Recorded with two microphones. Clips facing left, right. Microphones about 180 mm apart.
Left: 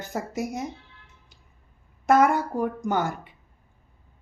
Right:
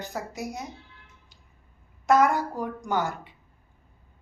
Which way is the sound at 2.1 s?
55° left (ahead or behind).